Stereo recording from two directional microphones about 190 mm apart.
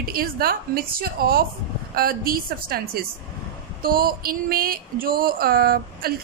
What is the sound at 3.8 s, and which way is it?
A woman's voice, 50° right (ahead or behind).